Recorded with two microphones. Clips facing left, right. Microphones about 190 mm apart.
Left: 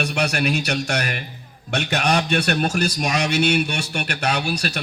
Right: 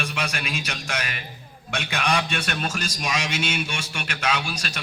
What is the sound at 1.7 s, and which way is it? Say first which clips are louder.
Speech: left 4 dB; 40° left (ahead or behind).